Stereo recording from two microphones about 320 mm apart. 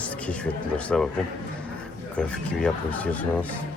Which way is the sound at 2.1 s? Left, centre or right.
Centre.